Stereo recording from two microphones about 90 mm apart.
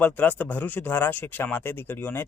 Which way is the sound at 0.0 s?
20° left (ahead or behind).